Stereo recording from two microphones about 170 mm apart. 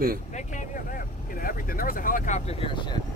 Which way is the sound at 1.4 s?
55° left (ahead or behind).